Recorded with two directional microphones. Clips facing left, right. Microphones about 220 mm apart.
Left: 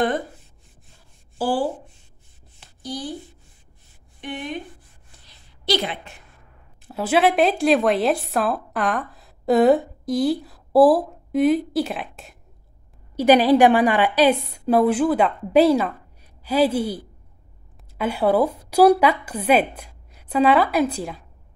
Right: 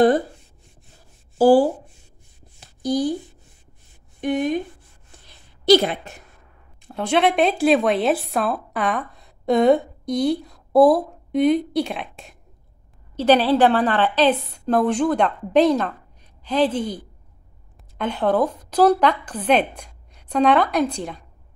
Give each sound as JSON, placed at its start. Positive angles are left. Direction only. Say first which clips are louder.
{"t": 1.4, "sound": "speech", "louder": "right 9 dB", "side_deg": -45}
{"t": 2.8, "sound": "a woman's voice", "louder": "right 10 dB", "side_deg": -45}
{"t": 4.2, "sound": "speech", "louder": "right 10 dB", "side_deg": -45}
{"t": 5.2, "sound": "a sound", "louder": "right 8 dB", "side_deg": -45}
{"t": 6.9, "sound": "a woman's voice", "louder": "even", "side_deg": 5}
{"t": 13.1, "sound": "a woman's voice", "louder": "left 2 dB", "side_deg": 10}